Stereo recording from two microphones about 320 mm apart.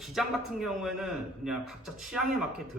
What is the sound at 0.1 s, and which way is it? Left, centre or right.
Speech, centre.